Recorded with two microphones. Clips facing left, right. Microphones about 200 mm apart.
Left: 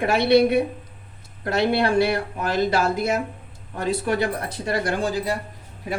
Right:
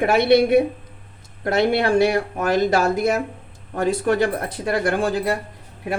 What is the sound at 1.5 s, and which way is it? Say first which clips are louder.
Speech: right 2 dB; 45° right (ahead or behind).